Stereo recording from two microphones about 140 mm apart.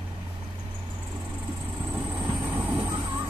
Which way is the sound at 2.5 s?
15° right (ahead or behind).